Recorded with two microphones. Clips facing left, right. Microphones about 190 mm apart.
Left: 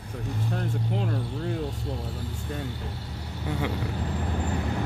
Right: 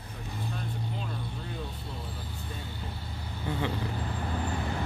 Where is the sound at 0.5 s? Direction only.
70° left (ahead or behind).